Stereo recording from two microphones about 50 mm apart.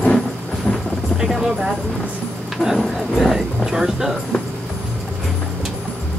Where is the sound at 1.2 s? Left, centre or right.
Centre.